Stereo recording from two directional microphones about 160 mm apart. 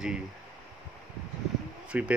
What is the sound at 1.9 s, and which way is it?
Speech, 10° right (ahead or behind).